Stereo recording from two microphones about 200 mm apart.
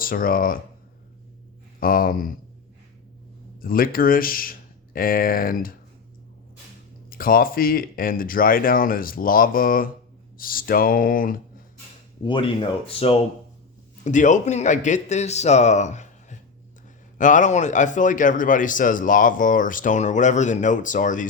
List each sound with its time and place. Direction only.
0.0 s speech: 45° left (ahead or behind)
1.8 s speech: 45° left (ahead or behind)
3.6 s speech: 45° left (ahead or behind)
7.1 s speech: 45° left (ahead or behind)
12.2 s speech: 25° left (ahead or behind)
14.0 s speech: 40° left (ahead or behind)